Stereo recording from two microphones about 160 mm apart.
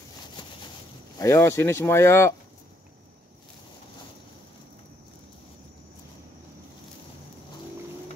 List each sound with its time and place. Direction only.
1.2 s speech: 15° left (ahead or behind)